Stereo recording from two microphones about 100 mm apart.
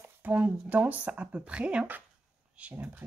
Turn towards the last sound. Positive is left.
turn(degrees=-15)  # may be behind; listen again after turning